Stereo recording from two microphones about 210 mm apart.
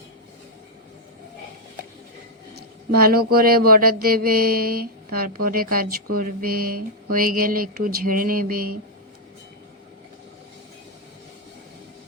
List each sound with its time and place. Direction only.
2.9 s mantra: 45° right (ahead or behind)